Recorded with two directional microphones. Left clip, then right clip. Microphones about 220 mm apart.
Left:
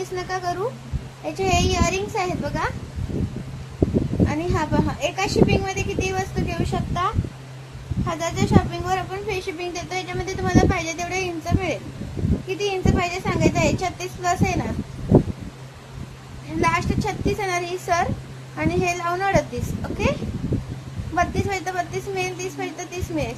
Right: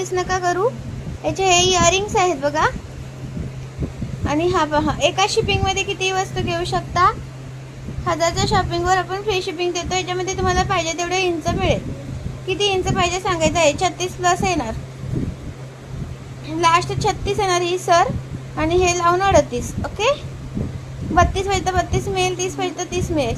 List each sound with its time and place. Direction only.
0.2 s a woman's voice: 20° right (ahead or behind)
4.3 s a woman's voice: 20° right (ahead or behind)
16.6 s a woman's voice: 20° right (ahead or behind)
21.2 s a woman's voice: 20° right (ahead or behind)